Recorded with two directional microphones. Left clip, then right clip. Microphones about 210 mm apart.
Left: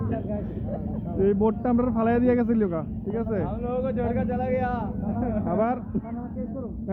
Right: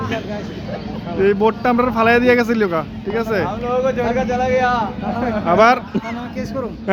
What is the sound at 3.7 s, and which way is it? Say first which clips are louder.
Speech: right 10 dB; 15° left (ahead or behind).